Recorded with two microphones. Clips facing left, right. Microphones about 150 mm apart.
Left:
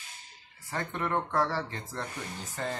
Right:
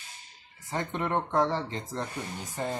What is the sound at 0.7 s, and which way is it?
Speech, 20° right (ahead or behind).